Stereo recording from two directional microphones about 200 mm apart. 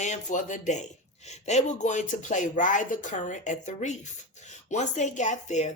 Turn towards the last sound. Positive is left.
turn(degrees=35)  # may be behind; listen again after turning